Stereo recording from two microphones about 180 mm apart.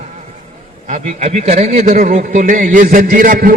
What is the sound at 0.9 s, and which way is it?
A man's voice, 35° right (ahead or behind).